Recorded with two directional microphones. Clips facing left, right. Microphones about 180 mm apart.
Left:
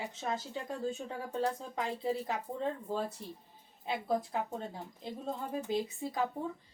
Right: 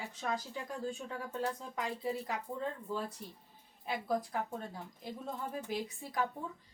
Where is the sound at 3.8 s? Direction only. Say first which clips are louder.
Left 2 dB; 25° left (ahead or behind).